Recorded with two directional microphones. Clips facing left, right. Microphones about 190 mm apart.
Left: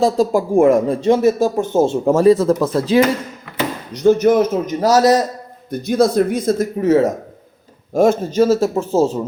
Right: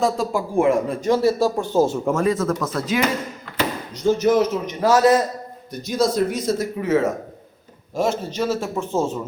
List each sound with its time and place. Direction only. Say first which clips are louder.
0.0 s speech: left 6 dB; 40° left (ahead or behind)
1.0 s speech: left 2 dB; 20° left (ahead or behind)
3.9 s speech: left 5 dB; 60° left (ahead or behind); by 5.2 s 40° left (ahead or behind)
5.7 s speech: left 6 dB; 55° left (ahead or behind); by 7.1 s 40° left (ahead or behind)
7.9 s speech: left 9 dB; 50° left (ahead or behind)